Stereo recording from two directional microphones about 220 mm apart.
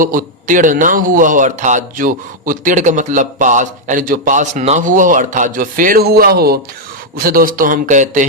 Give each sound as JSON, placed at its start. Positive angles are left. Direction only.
{"t": 0.0, "sound": "a man's voice", "side_deg": -40}